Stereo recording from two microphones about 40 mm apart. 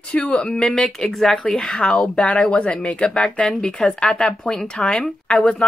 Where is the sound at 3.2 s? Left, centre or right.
Centre.